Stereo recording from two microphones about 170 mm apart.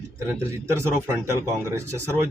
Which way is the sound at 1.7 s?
15° right (ahead or behind).